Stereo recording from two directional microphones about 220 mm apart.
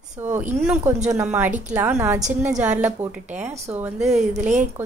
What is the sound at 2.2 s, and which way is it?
Speech, 35° right (ahead or behind).